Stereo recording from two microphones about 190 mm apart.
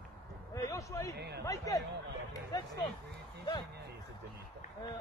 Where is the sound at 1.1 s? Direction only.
60° right (ahead or behind).